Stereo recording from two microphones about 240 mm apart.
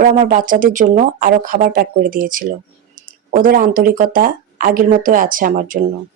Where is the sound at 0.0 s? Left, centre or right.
Right.